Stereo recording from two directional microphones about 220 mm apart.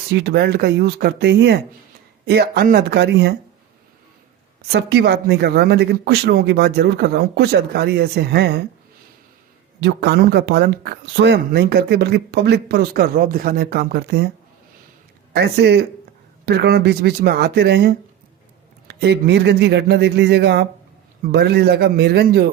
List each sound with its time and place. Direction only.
0.1 s speech: 50° right (ahead or behind)
4.7 s speech: 45° right (ahead or behind)
9.8 s speech: 50° right (ahead or behind)
15.3 s speech: 50° right (ahead or behind)